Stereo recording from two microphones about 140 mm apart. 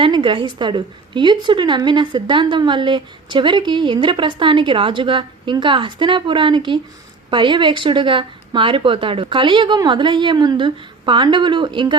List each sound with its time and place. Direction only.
0.0 s a woman's voice: 35° right (ahead or behind)